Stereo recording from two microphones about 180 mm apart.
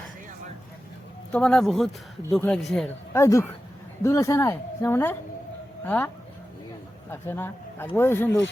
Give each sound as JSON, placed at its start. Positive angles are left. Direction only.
{"t": 1.3, "sound": "speech", "side_deg": 5}
{"t": 3.1, "sound": "a woman's voice", "side_deg": 15}
{"t": 7.1, "sound": "a woman's voice", "side_deg": 10}